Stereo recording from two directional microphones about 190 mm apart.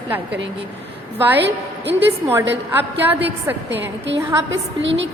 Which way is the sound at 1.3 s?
65° right (ahead or behind).